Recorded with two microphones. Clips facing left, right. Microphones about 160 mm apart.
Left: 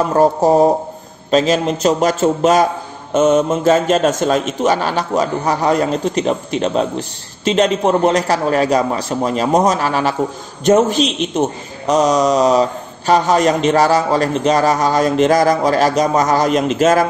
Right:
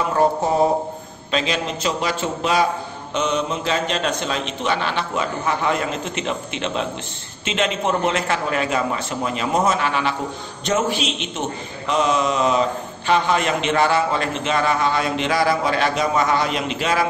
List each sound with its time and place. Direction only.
0.1 s a man's voice: 40° left (ahead or behind)